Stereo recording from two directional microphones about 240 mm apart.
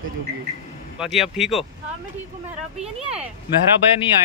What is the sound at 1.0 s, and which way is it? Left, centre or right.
Speech, centre.